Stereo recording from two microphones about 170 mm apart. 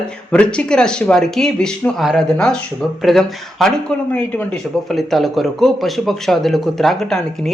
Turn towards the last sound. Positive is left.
turn(degrees=0)  # may be behind; listen again after turning